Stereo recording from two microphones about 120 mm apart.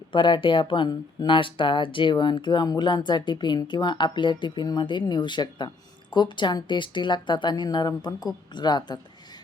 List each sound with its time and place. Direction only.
0.1 s speech: 45° left (ahead or behind)